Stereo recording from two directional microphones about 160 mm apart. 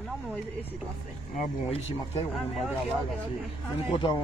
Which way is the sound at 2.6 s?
Centre (ahead or behind).